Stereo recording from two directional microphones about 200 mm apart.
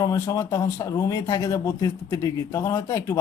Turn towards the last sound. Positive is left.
turn(degrees=15)  # may be behind; listen again after turning